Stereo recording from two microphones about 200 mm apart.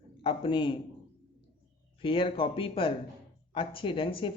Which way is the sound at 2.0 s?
25° left (ahead or behind).